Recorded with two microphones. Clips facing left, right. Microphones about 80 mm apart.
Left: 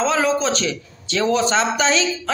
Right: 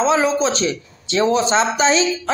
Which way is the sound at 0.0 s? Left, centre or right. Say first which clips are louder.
Right 2 dB; right.